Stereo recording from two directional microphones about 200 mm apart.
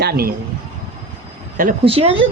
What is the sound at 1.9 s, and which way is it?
Speech, 30° right (ahead or behind).